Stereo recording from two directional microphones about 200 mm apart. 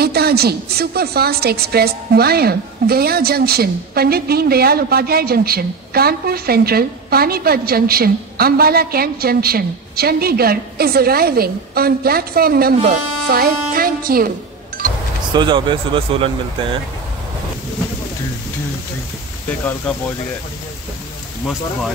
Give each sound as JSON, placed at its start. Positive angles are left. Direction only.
{"t": 0.0, "sound": "a woman's voice", "side_deg": -50}
{"t": 14.8, "sound": "music", "side_deg": -45}
{"t": 15.3, "sound": "speech", "side_deg": -25}